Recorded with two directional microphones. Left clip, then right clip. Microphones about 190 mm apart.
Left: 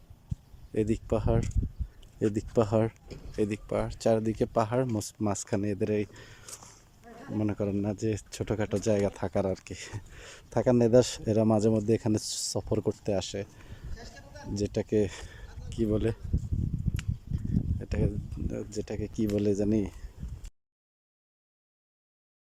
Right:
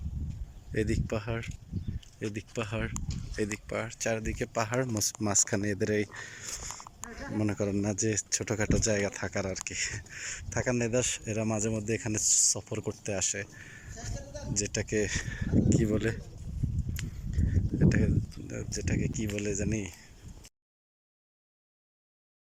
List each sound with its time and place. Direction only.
0.7 s speech: 15° left (ahead or behind)
2.3 s speech: 35° left (ahead or behind)
3.3 s speech: 15° left (ahead or behind)
14.5 s speech: 20° left (ahead or behind)
17.8 s speech: 15° left (ahead or behind)